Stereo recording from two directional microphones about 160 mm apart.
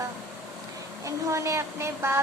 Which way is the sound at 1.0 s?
20° right (ahead or behind).